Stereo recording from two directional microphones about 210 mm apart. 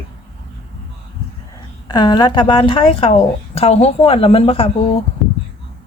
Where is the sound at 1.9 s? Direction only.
20° left (ahead or behind).